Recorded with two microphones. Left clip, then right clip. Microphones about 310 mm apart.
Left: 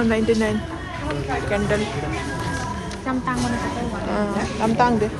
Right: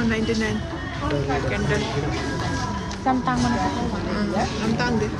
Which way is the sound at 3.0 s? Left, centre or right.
Right.